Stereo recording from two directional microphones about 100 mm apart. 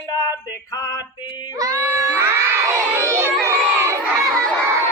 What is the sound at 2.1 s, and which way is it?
Crowd, 25° right (ahead or behind).